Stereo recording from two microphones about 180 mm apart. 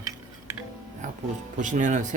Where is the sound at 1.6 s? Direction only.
45° right (ahead or behind).